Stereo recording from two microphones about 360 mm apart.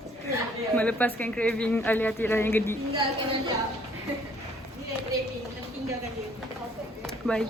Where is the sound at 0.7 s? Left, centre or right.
Centre.